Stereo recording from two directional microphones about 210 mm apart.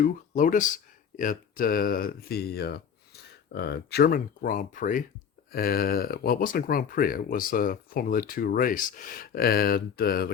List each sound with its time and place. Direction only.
0.0 s speech: 40° left (ahead or behind)